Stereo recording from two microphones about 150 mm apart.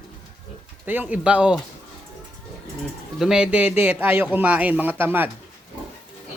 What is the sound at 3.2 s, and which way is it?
Speech, 5° right (ahead or behind).